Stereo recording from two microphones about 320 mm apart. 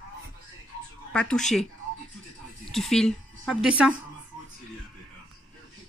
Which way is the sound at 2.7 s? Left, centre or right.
Centre.